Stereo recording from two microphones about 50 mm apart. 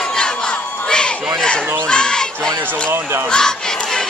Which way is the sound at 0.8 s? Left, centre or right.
Centre.